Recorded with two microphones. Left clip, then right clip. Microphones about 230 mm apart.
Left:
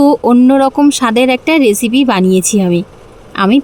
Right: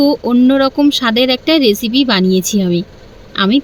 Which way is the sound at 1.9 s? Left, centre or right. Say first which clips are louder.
Left 2 dB; left.